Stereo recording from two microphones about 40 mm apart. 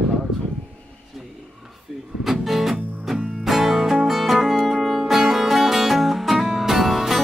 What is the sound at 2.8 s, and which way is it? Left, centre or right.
Music, right.